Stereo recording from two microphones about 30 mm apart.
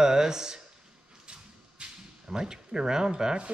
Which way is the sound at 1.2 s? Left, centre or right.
Right.